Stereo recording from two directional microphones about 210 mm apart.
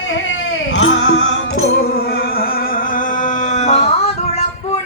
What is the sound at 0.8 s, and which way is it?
Music, 65° left (ahead or behind).